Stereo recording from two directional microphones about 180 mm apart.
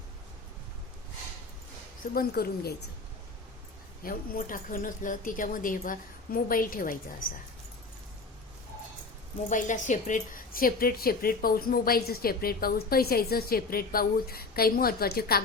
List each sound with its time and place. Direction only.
2.1 s speech: 60° left (ahead or behind)
4.0 s speech: 50° left (ahead or behind)
9.5 s speech: 45° left (ahead or behind)